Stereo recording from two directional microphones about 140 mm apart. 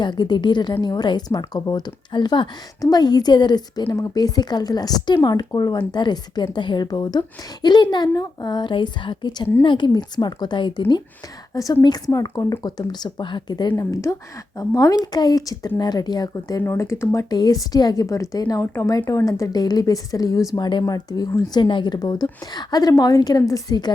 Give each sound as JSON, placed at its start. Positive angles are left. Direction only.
{"t": 0.0, "sound": "speech", "side_deg": 30}